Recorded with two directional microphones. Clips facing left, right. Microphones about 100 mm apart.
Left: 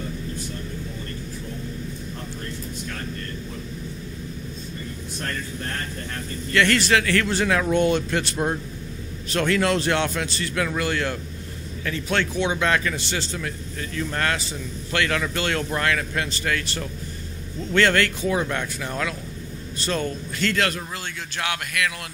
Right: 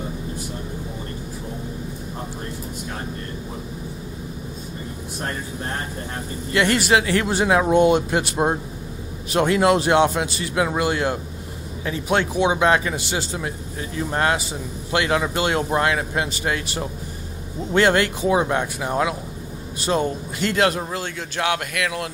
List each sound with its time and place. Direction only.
2.1 s speech: 20° right (ahead or behind)
5.2 s a man's voice: 20° right (ahead or behind)